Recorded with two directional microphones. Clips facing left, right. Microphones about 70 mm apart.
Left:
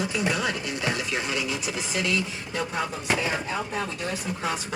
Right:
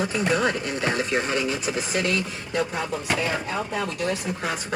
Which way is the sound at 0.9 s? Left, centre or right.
Right.